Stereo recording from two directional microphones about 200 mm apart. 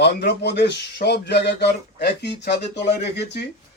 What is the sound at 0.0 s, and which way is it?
A man's voice, 55° left (ahead or behind).